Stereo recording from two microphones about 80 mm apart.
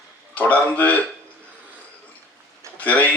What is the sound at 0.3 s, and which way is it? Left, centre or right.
Speech, centre.